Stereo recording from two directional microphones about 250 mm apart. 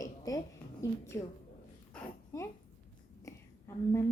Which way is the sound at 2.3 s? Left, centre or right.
Centre.